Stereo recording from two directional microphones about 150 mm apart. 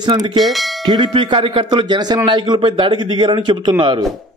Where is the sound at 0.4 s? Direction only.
Centre (ahead or behind).